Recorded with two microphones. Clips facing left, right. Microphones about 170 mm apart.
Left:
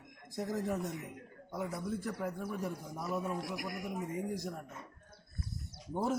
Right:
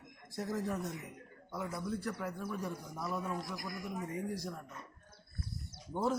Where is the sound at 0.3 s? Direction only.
15° left (ahead or behind).